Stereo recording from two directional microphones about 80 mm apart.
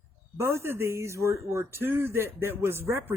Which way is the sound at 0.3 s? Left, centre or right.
Right.